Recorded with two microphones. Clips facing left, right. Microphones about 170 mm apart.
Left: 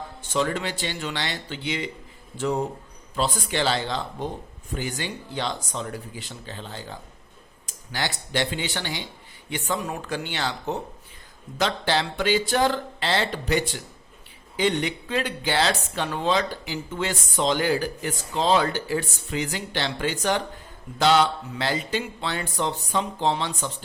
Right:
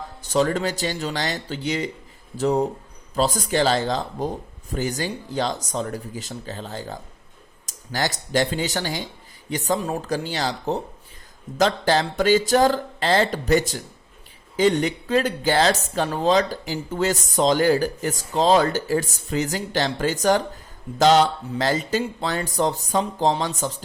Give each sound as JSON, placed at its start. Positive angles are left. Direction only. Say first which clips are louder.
{"t": 0.2, "sound": "speech", "louder": "right 5 dB", "side_deg": -40}